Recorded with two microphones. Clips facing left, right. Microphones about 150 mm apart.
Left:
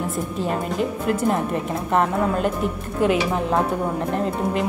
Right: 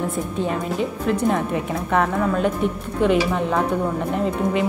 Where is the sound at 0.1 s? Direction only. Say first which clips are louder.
Right 1 dB; centre (ahead or behind).